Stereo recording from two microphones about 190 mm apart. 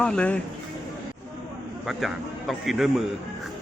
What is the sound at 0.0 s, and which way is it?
Speech, 5° left (ahead or behind).